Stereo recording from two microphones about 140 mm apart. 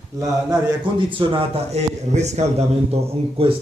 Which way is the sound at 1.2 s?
40° right (ahead or behind).